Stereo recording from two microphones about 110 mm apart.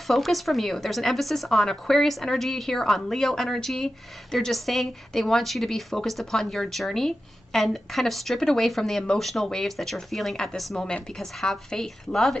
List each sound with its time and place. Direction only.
0.0 s speech: centre (ahead or behind)